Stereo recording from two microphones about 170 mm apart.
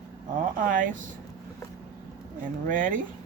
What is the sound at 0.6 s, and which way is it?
Speech, 50° right (ahead or behind).